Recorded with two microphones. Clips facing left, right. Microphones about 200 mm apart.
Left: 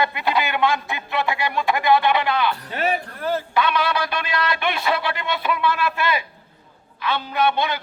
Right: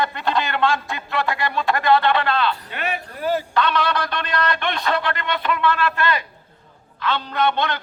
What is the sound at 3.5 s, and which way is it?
A man's voice, 10° left (ahead or behind).